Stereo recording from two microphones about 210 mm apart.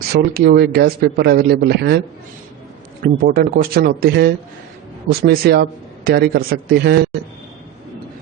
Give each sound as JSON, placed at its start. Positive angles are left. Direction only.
{"t": 0.1, "sound": "speech", "side_deg": -45}
{"t": 3.0, "sound": "speech", "side_deg": -45}